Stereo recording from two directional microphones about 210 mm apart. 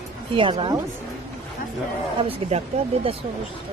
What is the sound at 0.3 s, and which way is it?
Speech, 25° right (ahead or behind).